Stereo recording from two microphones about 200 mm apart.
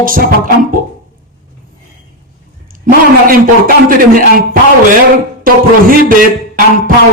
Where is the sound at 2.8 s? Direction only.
45° right (ahead or behind).